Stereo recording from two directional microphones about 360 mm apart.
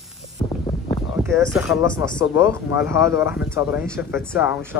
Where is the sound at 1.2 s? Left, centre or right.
Centre.